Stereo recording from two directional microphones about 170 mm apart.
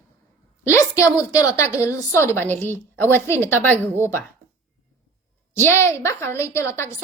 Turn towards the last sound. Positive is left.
turn(degrees=15)  # may be behind; listen again after turning